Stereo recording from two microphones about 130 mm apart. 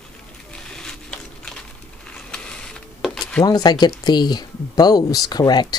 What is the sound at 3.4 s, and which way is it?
Speech, 30° left (ahead or behind).